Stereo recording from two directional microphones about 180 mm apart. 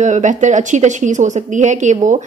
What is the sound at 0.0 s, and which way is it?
A woman's voice, 40° right (ahead or behind).